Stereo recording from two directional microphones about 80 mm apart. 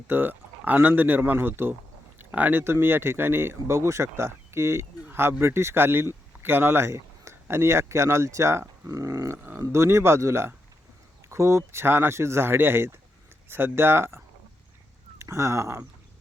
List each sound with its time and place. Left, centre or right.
0.1 s speech: right
9.0 s a sound: right
9.4 s speech: right
9.7 s speech: right
15.2 s speech: right